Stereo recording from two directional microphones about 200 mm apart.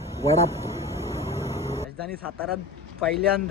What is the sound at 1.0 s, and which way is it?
Vehicle, 15° right (ahead or behind).